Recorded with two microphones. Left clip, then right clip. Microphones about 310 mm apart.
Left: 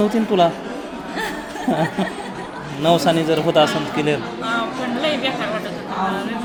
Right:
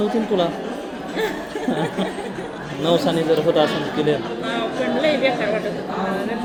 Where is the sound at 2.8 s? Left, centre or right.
Left.